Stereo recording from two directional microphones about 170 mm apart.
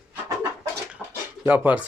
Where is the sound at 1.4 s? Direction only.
10° right (ahead or behind).